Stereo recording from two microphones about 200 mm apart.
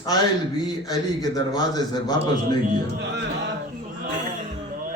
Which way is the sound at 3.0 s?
60° right (ahead or behind).